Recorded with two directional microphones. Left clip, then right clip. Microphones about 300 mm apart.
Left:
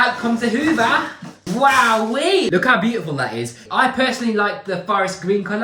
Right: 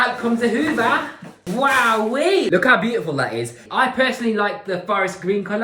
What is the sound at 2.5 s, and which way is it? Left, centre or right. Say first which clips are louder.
Speech: right 1 dB; right.